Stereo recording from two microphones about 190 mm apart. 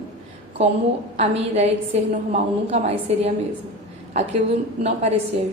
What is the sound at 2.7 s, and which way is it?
Speech, 35° right (ahead or behind).